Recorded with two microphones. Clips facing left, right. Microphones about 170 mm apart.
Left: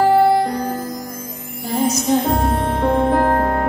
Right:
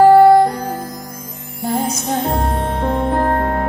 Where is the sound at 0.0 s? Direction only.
55° right (ahead or behind).